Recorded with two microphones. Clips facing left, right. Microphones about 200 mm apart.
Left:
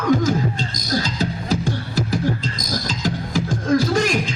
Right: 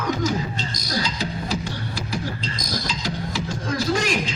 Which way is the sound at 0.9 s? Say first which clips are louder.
Left 5 dB; 45° left (ahead or behind).